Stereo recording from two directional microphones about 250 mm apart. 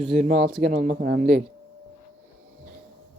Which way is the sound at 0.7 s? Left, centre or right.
Right.